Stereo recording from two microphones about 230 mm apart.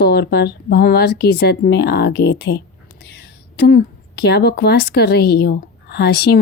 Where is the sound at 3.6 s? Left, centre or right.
Left.